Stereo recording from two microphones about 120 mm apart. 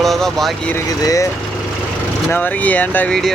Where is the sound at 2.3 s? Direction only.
15° left (ahead or behind).